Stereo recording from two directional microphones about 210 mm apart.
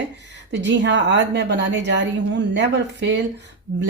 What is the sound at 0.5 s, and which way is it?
Speech, 60° right (ahead or behind).